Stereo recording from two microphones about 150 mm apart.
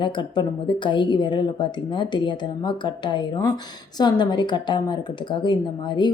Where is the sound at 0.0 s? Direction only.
30° left (ahead or behind).